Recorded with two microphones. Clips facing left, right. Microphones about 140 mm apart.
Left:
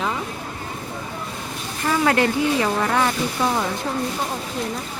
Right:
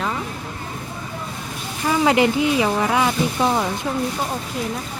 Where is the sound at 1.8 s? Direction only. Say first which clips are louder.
Right 2 dB; 15° right (ahead or behind).